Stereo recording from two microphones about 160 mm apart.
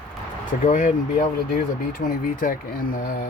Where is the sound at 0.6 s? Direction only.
50° left (ahead or behind).